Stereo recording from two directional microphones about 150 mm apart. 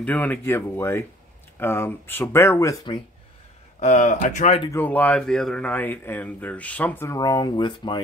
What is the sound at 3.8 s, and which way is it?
Speech, 55° left (ahead or behind).